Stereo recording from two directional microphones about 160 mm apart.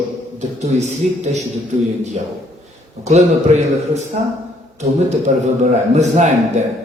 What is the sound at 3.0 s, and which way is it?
A man's voice, 45° right (ahead or behind).